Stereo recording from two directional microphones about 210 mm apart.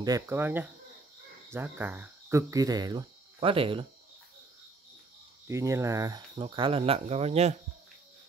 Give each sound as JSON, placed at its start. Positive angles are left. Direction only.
{"t": 0.0, "sound": "speech", "side_deg": -15}
{"t": 5.5, "sound": "speech", "side_deg": -15}